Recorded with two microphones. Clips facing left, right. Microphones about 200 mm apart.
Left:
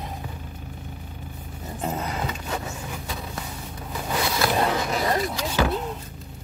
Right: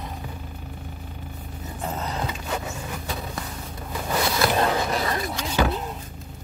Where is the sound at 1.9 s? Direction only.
15° left (ahead or behind).